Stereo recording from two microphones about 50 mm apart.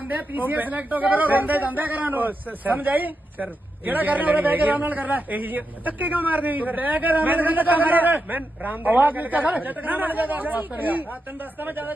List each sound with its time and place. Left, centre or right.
0.1 s speech: right